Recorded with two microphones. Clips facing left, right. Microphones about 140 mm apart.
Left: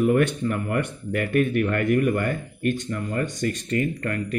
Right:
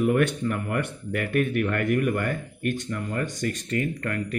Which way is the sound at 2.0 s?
35° left (ahead or behind).